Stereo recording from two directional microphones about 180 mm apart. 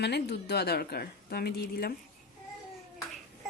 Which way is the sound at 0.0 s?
65° left (ahead or behind).